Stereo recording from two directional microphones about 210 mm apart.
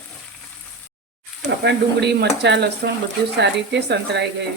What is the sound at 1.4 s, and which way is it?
Speech, 55° right (ahead or behind).